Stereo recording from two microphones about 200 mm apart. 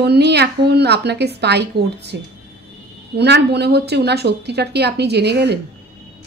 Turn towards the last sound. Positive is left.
turn(degrees=-55)  # may be behind; listen again after turning